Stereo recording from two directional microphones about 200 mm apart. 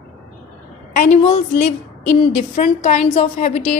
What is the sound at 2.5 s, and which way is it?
A woman's voice, 35° left (ahead or behind).